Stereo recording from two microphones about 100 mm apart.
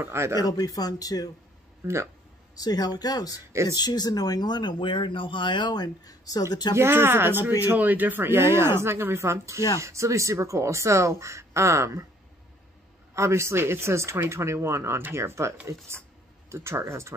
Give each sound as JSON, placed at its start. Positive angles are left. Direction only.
{"t": 0.0, "sound": "speech", "side_deg": -25}
{"t": 0.4, "sound": "speech", "side_deg": 40}
{"t": 1.8, "sound": "speech", "side_deg": -25}
{"t": 2.5, "sound": "speech", "side_deg": 40}
{"t": 6.7, "sound": "speech", "side_deg": -25}
{"t": 13.1, "sound": "speech", "side_deg": -30}